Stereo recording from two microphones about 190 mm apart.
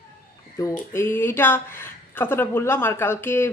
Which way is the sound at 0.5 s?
15° left (ahead or behind).